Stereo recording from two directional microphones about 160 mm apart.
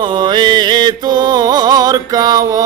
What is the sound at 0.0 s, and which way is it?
Music, 30° right (ahead or behind).